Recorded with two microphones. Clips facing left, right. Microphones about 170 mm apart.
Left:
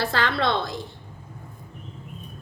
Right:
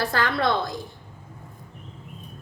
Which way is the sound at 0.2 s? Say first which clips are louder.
Right 1 dB; 25° left (ahead or behind).